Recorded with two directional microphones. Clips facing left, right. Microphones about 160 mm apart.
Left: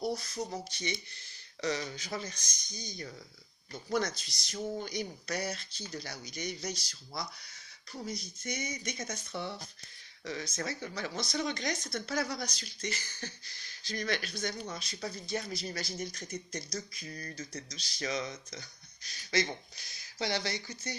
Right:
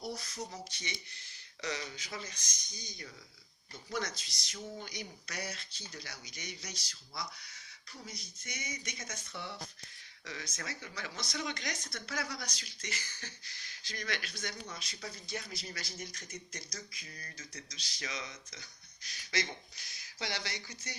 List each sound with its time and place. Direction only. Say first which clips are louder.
0.5 s speech: left 7 dB; 35° left (ahead or behind)